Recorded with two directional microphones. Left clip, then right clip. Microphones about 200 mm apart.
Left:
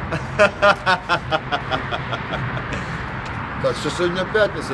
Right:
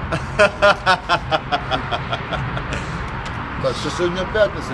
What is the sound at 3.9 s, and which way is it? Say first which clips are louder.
Speech: even; 35° left (ahead or behind).